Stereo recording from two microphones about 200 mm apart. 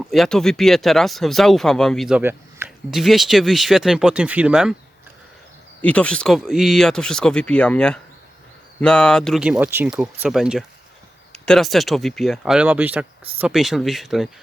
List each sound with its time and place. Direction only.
0.1 s speech: centre (ahead or behind)
5.8 s speech: 5° left (ahead or behind)